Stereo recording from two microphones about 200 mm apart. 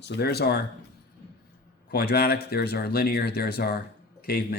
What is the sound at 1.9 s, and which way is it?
Speech, 50° left (ahead or behind).